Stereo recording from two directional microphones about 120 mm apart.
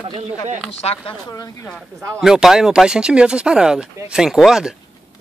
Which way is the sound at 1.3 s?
30° left (ahead or behind).